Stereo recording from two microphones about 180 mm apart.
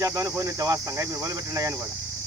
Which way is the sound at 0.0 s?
20° right (ahead or behind).